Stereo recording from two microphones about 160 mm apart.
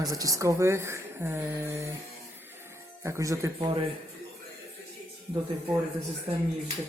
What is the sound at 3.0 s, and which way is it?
Speech, 20° right (ahead or behind).